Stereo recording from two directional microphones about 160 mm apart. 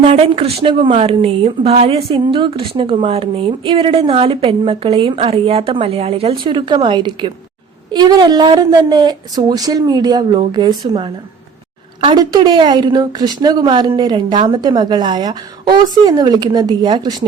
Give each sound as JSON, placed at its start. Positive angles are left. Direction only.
{"t": 0.0, "sound": "a woman's voice", "side_deg": -40}